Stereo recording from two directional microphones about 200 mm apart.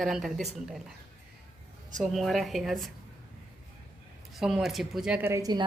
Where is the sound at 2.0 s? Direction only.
Centre (ahead or behind).